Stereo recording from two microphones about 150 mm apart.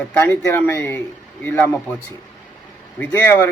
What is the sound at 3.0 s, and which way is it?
Speech, 15° left (ahead or behind).